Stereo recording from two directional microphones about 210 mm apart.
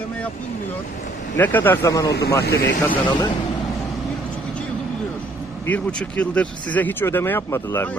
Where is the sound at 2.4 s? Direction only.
50° left (ahead or behind).